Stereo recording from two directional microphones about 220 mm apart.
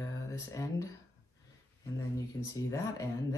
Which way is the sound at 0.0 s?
15° left (ahead or behind).